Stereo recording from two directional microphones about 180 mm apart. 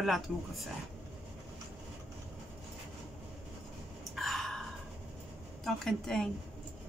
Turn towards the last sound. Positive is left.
turn(degrees=0)  # may be behind; listen again after turning